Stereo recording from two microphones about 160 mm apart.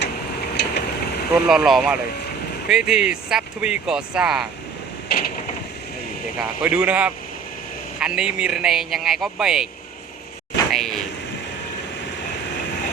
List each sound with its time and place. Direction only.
0.5 s a sound: 90° left
1.5 s speech: centre (ahead or behind)
5.1 s mechanisms: 80° left
6.4 s speech: 5° right (ahead or behind)
10.7 s speech: centre (ahead or behind)